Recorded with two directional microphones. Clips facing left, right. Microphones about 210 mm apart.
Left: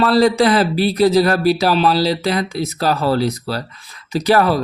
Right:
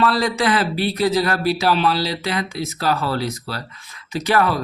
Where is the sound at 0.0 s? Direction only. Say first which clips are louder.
Left 6 dB; 35° left (ahead or behind).